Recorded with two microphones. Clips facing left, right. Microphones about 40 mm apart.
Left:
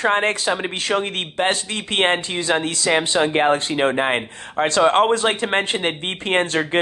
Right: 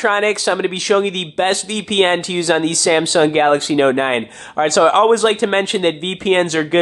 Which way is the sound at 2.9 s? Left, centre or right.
Centre.